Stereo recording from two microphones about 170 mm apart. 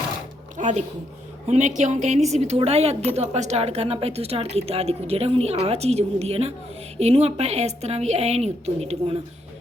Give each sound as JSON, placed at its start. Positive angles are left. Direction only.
{"t": 0.5, "sound": "a woman's voice", "side_deg": -45}